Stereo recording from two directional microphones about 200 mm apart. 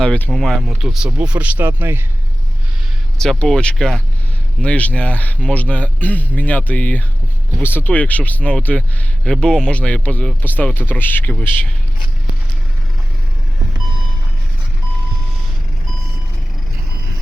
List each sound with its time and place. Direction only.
0.0 s speech: 5° left (ahead or behind); by 2.0 s 10° right (ahead or behind)
3.2 s speech: 5° left (ahead or behind)